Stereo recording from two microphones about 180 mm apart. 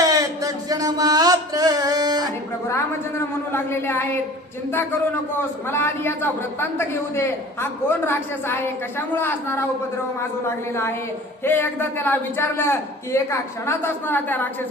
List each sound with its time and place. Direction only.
0.0 s music: 20° right (ahead or behind)
3.5 s a man's voice: 15° left (ahead or behind)